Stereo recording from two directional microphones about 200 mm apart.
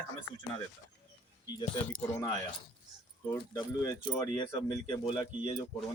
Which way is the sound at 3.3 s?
20° left (ahead or behind).